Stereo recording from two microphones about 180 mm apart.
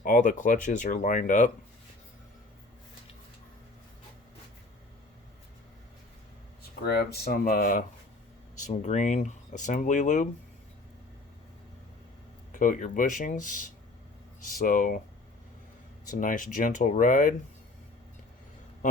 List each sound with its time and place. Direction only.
0.0 s speech: 50° left (ahead or behind)
6.6 s speech: 60° left (ahead or behind); by 10.2 s 45° left (ahead or behind)
12.5 s speech: 45° left (ahead or behind)
16.0 s speech: 45° left (ahead or behind)